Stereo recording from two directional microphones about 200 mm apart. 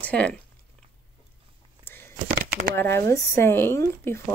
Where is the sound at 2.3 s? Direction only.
50° right (ahead or behind).